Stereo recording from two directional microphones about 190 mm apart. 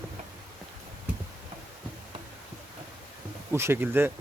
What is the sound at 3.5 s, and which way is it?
Speech, 15° right (ahead or behind).